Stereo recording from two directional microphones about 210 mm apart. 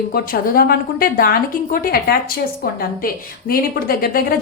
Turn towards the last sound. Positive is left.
turn(degrees=45)  # may be behind; listen again after turning